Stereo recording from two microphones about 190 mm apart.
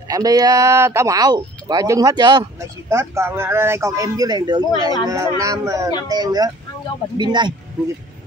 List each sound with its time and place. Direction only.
0.1 s speech: 20° right (ahead or behind)